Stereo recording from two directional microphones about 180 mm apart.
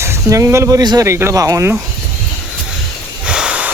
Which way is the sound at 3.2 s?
5° right (ahead or behind).